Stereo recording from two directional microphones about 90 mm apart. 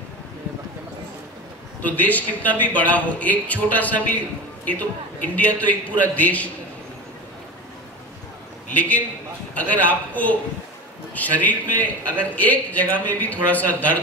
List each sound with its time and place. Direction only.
1.8 s a man's voice: 15° left (ahead or behind)
8.7 s a man's voice: 15° left (ahead or behind)